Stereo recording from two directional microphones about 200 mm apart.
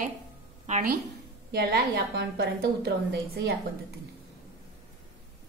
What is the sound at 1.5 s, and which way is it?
A woman's voice, 55° right (ahead or behind).